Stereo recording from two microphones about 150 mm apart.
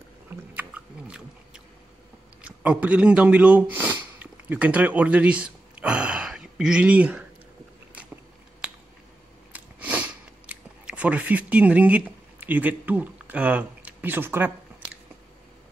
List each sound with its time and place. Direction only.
0.3 s biting: 10° right (ahead or behind)
2.4 s speech: 10° right (ahead or behind)
9.5 s a sound: 10° right (ahead or behind)